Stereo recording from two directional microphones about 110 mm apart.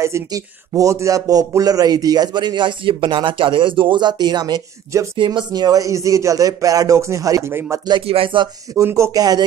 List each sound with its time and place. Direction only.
0.0 s a man's voice: 30° right (ahead or behind)
8.1 s speech: 55° right (ahead or behind)
8.7 s speech: 25° right (ahead or behind)